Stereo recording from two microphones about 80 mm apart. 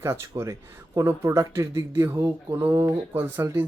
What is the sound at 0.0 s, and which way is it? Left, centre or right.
Speech, right.